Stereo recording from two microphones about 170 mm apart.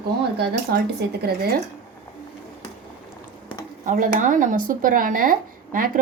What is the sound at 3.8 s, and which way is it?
Speech, 50° right (ahead or behind).